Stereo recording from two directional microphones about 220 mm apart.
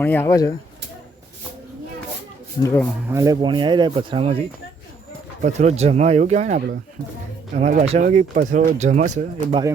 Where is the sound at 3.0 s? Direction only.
15° right (ahead or behind).